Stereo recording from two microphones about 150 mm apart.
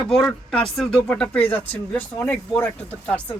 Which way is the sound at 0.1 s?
5° left (ahead or behind).